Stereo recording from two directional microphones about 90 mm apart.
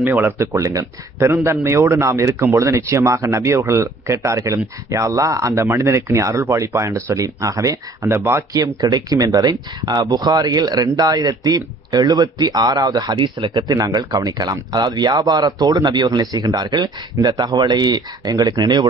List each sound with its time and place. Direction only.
0.0 s speech: 20° right (ahead or behind)
8.5 s speech: 50° right (ahead or behind)
13.5 s speech: 45° right (ahead or behind)